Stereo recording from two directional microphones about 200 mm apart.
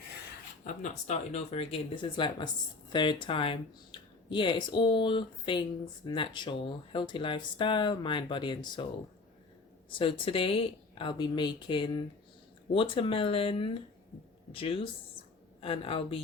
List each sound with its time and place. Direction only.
0.6 s speech: 35° left (ahead or behind)
9.9 s speech: 25° left (ahead or behind)